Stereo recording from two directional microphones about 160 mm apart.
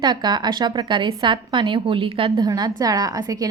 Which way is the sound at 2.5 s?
25° right (ahead or behind).